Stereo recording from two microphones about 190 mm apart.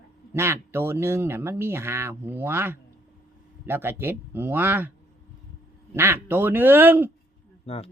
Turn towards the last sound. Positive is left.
turn(degrees=30)  # may be behind; listen again after turning